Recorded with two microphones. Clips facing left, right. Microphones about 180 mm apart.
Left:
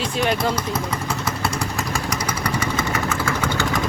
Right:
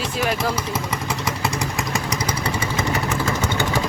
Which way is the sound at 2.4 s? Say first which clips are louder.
Even; 25° right (ahead or behind).